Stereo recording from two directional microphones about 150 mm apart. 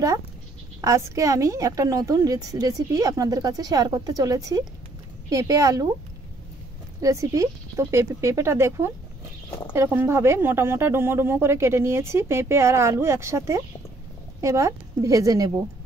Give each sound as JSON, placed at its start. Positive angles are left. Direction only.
{"t": 0.7, "sound": "a woman's voice", "side_deg": -20}
{"t": 7.0, "sound": "a woman's voice", "side_deg": -20}